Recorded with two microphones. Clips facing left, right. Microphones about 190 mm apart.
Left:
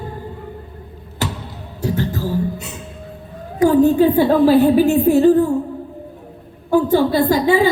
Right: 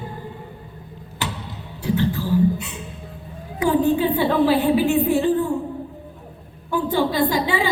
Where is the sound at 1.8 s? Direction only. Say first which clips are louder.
Left 1 dB; 40° left (ahead or behind).